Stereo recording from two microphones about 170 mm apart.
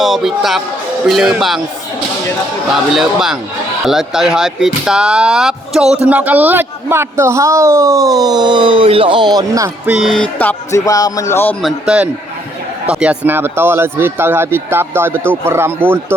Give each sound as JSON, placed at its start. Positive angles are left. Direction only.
{"t": 0.0, "sound": "speech", "side_deg": 0}
{"t": 2.7, "sound": "a man's voice", "side_deg": 0}
{"t": 10.0, "sound": "speech", "side_deg": 5}
{"t": 10.8, "sound": "a man's voice", "side_deg": 20}
{"t": 11.6, "sound": "a man's voice", "side_deg": -5}